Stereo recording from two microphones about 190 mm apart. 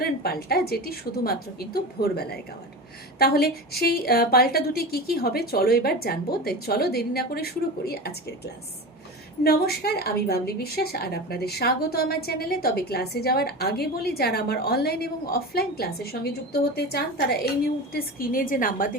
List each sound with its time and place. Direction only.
0.0 s a woman's voice: 55° left (ahead or behind)
9.4 s a woman's voice: 55° left (ahead or behind)